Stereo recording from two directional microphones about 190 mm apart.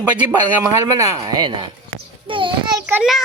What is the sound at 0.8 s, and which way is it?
A child's voice, 15° right (ahead or behind).